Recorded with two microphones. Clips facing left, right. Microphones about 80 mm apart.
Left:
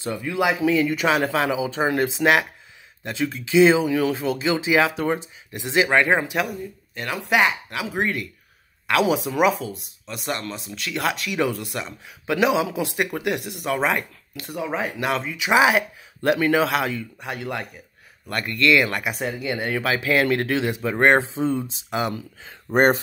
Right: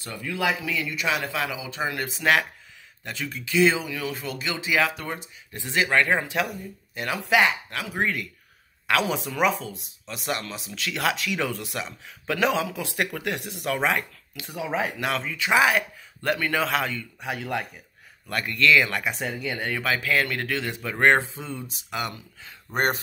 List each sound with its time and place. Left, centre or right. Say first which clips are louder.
0.0 s speech: left 5 dB; left
0.6 s speech: left 10 dB; left
3.1 s speech: left 7 dB; left
3.8 s speech: left 10 dB; left
5.5 s speech: left 4 dB; centre
7.0 s speech: left 1 dB; centre
7.8 s speech: left 3 dB; centre
12.4 s speech: left 4 dB; centre
16.6 s speech: left 3 dB; centre
19.7 s speech: left 3 dB; centre
21.3 s speech: left 12 dB; left